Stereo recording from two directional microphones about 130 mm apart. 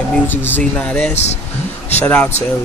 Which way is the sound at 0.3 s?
15° left (ahead or behind).